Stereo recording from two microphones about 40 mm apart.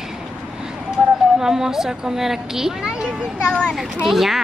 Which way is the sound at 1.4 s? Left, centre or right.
Centre.